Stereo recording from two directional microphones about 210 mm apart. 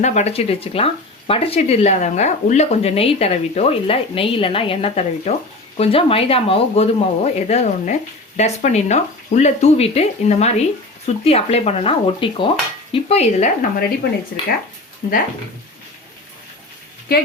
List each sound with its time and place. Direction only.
0.0 s speech: 35° left (ahead or behind)
15.0 s speech: 45° left (ahead or behind)